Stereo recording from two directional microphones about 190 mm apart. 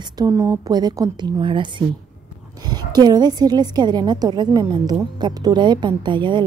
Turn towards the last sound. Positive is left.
turn(degrees=-25)  # may be behind; listen again after turning